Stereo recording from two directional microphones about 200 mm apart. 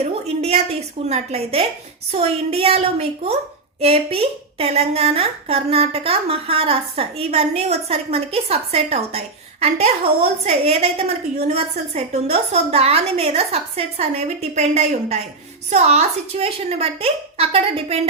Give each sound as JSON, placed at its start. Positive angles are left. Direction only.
{"t": 0.3, "sound": "a woman's voice", "side_deg": -30}